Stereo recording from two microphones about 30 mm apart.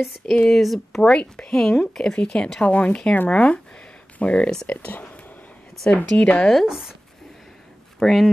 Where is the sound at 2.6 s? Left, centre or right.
Left.